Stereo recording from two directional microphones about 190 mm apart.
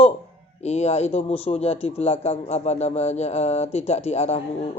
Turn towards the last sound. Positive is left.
turn(degrees=35)  # may be behind; listen again after turning